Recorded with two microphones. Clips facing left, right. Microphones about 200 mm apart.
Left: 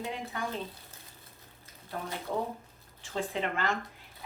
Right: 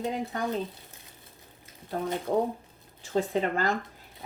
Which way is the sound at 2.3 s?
40° right (ahead or behind).